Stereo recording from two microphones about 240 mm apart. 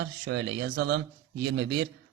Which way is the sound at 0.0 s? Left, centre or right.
Right.